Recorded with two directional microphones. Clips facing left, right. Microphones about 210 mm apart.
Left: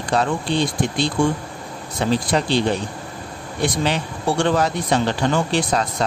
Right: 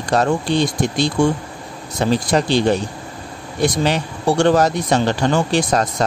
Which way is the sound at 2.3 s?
45° right (ahead or behind).